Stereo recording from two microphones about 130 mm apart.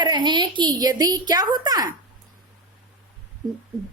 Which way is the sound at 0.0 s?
35° right (ahead or behind).